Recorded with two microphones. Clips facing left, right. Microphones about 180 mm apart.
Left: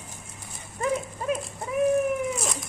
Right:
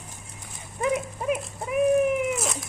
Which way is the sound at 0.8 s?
15° right (ahead or behind).